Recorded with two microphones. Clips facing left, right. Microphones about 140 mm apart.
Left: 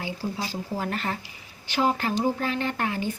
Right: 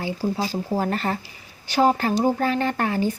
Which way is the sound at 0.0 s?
40° right (ahead or behind).